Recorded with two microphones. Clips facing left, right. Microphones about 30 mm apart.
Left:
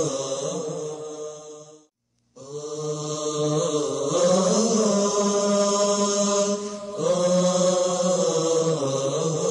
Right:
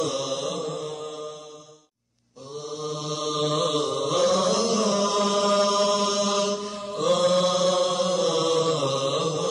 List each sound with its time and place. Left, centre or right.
0.0 s mantra: right
0.5 s mantra: right
2.6 s mantra: right
3.3 s mantra: right
3.8 s chant: right
4.2 s chant: right
5.2 s chant: right
5.7 s mantra: right
6.7 s mantra: right
7.4 s chant: right
8.6 s mantra: right